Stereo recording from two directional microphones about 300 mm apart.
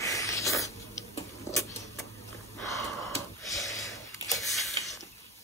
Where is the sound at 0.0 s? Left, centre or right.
Centre.